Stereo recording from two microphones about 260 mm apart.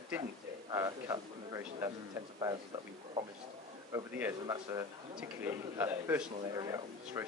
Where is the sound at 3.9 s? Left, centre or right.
Centre.